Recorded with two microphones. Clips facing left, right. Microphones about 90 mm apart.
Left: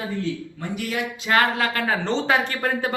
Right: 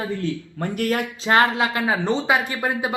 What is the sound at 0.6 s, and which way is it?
Speech, 45° right (ahead or behind).